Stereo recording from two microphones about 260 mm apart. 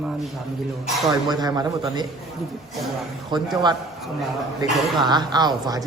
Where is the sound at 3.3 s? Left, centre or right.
Centre.